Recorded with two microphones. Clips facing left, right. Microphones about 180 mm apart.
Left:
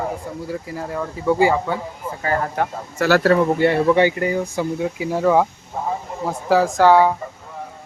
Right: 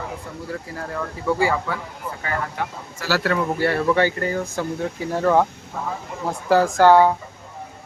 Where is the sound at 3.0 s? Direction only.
65° left (ahead or behind).